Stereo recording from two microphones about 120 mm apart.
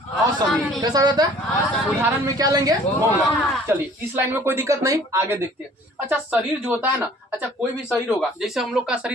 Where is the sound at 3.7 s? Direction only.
15° right (ahead or behind).